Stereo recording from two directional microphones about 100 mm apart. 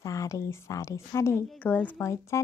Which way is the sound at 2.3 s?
30° left (ahead or behind).